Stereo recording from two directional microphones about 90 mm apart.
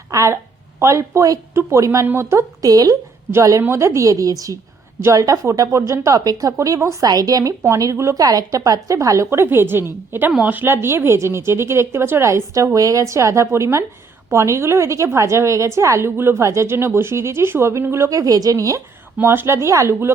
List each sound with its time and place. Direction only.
0.1 s a woman's voice: 40° right (ahead or behind)
2.6 s a woman's voice: 45° right (ahead or behind)
19.2 s a woman's voice: 25° right (ahead or behind)